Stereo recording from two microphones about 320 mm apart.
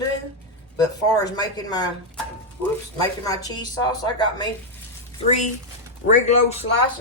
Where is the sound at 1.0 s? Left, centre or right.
Centre.